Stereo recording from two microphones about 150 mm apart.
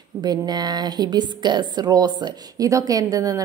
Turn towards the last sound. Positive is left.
turn(degrees=-25)  # may be behind; listen again after turning